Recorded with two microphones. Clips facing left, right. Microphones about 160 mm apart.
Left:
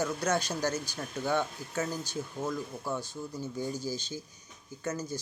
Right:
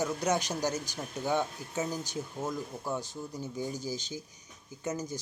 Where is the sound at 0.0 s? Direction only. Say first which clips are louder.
Even; 15° right (ahead or behind).